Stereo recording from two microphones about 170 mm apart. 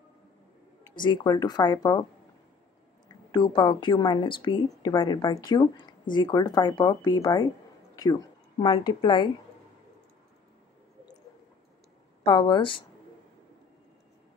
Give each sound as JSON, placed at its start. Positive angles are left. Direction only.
{"t": 1.0, "sound": "speech", "side_deg": 25}
{"t": 3.1, "sound": "speech", "side_deg": 25}
{"t": 7.9, "sound": "a sound", "side_deg": 20}
{"t": 8.6, "sound": "speech", "side_deg": 25}
{"t": 12.2, "sound": "speech", "side_deg": 30}